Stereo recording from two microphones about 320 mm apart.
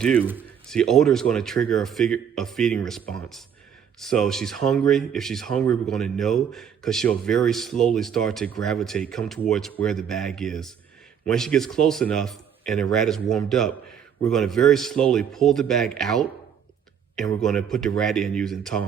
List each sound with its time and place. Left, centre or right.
0.0 s speech: centre